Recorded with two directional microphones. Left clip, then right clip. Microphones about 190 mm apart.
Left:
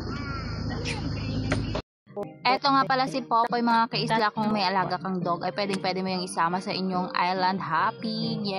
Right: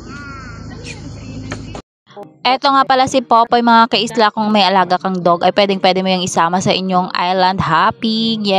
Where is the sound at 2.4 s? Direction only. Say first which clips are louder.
Right 10 dB; 45° right (ahead or behind).